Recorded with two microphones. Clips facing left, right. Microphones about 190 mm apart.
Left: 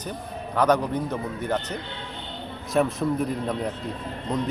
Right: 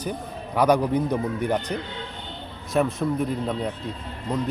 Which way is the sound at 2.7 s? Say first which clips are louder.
Even; centre (ahead or behind).